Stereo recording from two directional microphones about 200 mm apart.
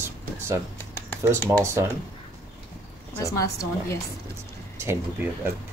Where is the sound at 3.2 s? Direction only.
15° left (ahead or behind).